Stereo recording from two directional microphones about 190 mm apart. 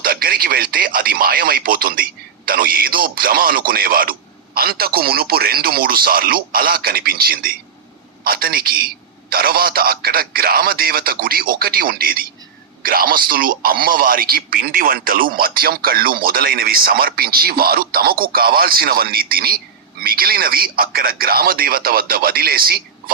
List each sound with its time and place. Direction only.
0.0 s a man's voice: 50° right (ahead or behind)